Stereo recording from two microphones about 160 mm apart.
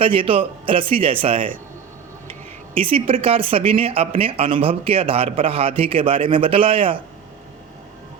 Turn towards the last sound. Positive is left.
turn(degrees=-35)  # may be behind; listen again after turning